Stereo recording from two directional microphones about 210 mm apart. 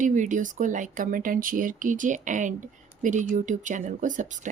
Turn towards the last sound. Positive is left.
turn(degrees=-35)  # may be behind; listen again after turning